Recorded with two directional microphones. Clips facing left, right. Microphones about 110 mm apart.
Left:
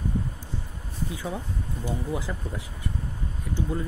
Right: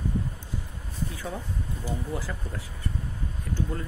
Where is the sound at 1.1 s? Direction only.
15° left (ahead or behind).